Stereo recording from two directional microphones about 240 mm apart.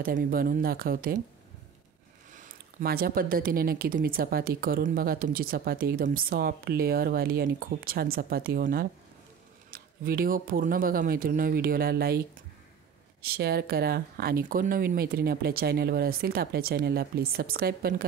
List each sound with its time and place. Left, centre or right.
0.0 s speech: right
2.3 s speech: right
13.2 s speech: right